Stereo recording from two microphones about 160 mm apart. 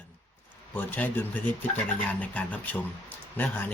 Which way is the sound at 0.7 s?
10° left (ahead or behind).